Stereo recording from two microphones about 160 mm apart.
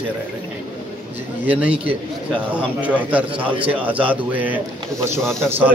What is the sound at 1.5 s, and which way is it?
A man's voice, 10° right (ahead or behind).